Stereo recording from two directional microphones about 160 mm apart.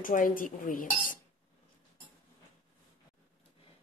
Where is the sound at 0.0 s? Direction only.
60° left (ahead or behind).